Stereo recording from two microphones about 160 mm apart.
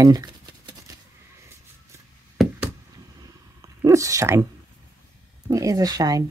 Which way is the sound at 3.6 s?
20° right (ahead or behind).